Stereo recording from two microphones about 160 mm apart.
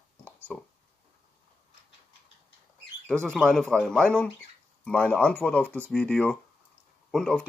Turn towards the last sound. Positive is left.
turn(degrees=5)  # may be behind; listen again after turning